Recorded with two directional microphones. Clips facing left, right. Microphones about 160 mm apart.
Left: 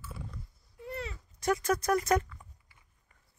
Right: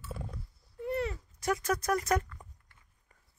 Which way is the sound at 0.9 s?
55° right (ahead or behind).